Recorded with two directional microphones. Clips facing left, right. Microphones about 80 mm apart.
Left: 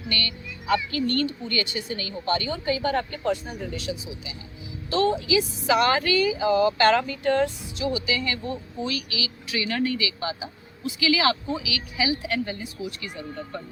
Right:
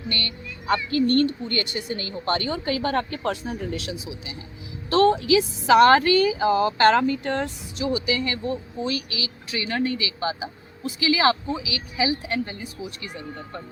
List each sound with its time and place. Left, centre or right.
0.1 s speech: right
4.9 s speech: right
5.8 s speech: right